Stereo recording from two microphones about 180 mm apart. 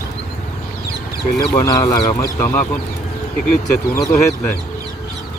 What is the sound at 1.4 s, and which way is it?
Speech, 20° left (ahead or behind).